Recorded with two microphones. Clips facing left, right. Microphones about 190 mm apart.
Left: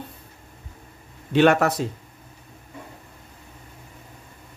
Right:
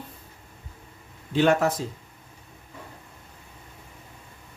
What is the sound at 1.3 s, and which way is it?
Speech, 70° left (ahead or behind).